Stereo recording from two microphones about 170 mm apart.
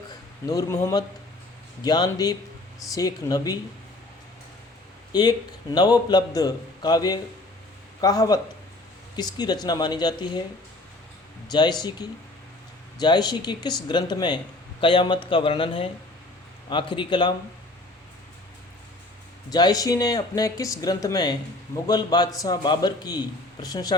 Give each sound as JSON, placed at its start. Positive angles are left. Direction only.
{"t": 0.4, "sound": "speech", "side_deg": 20}
{"t": 5.1, "sound": "speech", "side_deg": 25}
{"t": 11.4, "sound": "speech", "side_deg": 25}
{"t": 19.5, "sound": "speech", "side_deg": 25}